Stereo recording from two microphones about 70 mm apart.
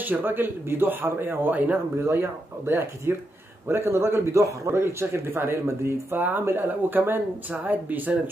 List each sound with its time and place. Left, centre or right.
0.0 s speech: right
4.7 s speech: right